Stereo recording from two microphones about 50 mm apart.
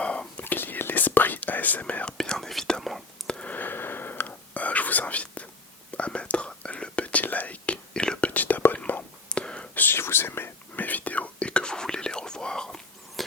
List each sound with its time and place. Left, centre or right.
0.0 s whispering: left
0.4 s whispering: left
2.4 s whispering: centre
3.2 s a sound: left
3.5 s whispering: left
7.9 s whispering: centre
8.3 s whispering: left
9.3 s whispering: left
9.9 s whispering: left
10.8 s whispering: left; by 12.8 s centre
13.2 s a sound: centre